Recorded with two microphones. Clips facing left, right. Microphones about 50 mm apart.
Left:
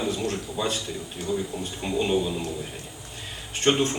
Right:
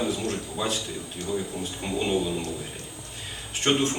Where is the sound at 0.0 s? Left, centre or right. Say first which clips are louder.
Even; centre.